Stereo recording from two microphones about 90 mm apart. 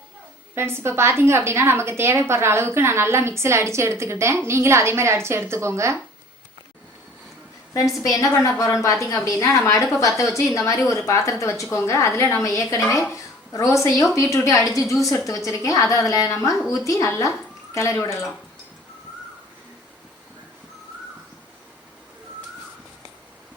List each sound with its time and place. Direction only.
0.5 s a woman's voice: 30° right (ahead or behind)
8.0 s a woman's voice: 40° left (ahead or behind)